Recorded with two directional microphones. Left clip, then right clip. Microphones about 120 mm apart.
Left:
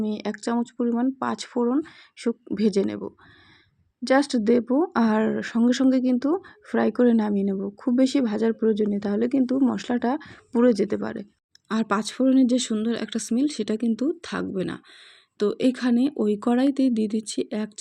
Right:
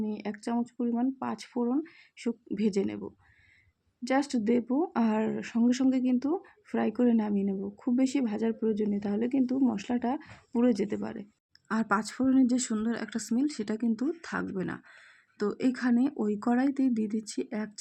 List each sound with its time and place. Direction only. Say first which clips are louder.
0.0 s speech: left 7 dB; 15° left (ahead or behind)
4.0 s speech: left 8 dB; 15° left (ahead or behind)
12.5 s speech: left 6 dB; 15° left (ahead or behind)